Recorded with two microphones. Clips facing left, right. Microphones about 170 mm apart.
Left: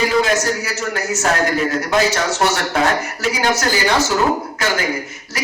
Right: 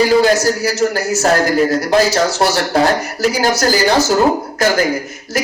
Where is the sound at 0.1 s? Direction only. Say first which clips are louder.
Right 5 dB; 35° right (ahead or behind).